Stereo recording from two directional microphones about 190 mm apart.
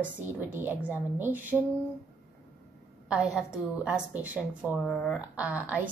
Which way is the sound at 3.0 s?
5° right (ahead or behind).